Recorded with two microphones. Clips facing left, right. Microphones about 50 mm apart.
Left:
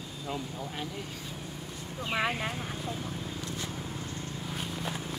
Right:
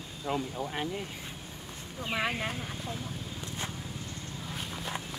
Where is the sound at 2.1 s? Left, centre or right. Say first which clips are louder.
Left 1 dB; centre.